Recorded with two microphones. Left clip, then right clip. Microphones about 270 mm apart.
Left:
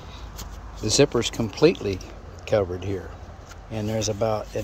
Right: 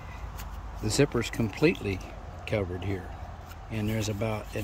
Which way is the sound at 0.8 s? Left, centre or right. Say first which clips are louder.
Left 7 dB; centre.